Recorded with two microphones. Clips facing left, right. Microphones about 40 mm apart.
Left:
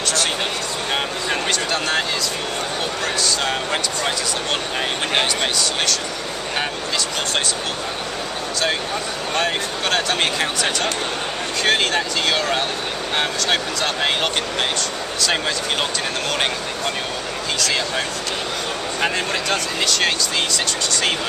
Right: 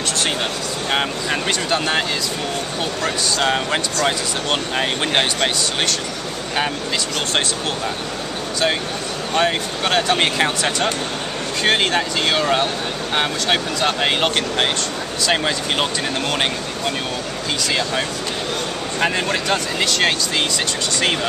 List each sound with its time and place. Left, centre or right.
1.5 s speech: centre
3.4 s speech: centre
9.4 s speech: centre
11.6 s speech: centre
17.6 s speech: centre
19.1 s speech: centre